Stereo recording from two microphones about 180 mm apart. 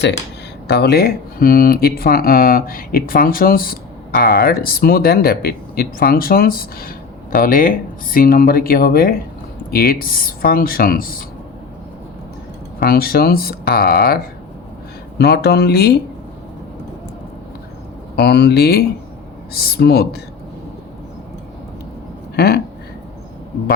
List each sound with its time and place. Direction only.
0.7 s speech: 65° left (ahead or behind)
12.8 s speech: 55° left (ahead or behind)
15.2 s speech: 65° left (ahead or behind)
18.2 s speech: 65° left (ahead or behind)
22.4 s a sound: 60° left (ahead or behind)